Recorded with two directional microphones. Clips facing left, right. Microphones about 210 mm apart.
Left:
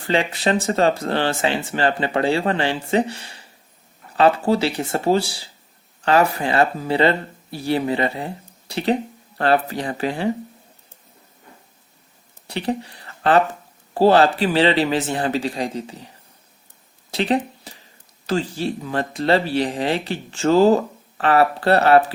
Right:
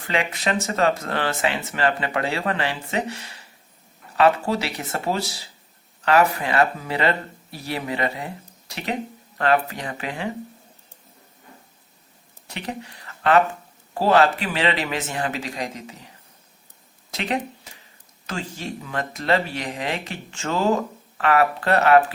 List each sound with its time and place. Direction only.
0.1 s speech: 30° left (ahead or behind)
12.5 s speech: 35° left (ahead or behind)
17.1 s speech: 30° left (ahead or behind)